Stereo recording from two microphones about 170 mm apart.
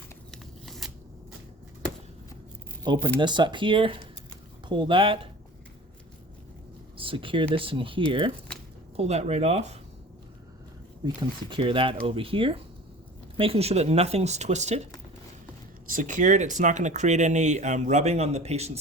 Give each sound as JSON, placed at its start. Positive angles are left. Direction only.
{"t": 0.3, "sound": "a sound", "side_deg": 0}
{"t": 2.8, "sound": "speech", "side_deg": -25}
{"t": 6.9, "sound": "speech", "side_deg": -30}
{"t": 11.0, "sound": "speech", "side_deg": -25}
{"t": 15.9, "sound": "speech", "side_deg": -50}